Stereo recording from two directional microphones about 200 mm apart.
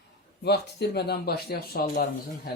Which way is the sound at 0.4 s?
55° left (ahead or behind).